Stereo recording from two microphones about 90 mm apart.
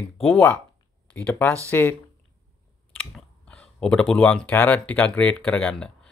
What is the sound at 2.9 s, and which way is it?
Speech, 10° left (ahead or behind).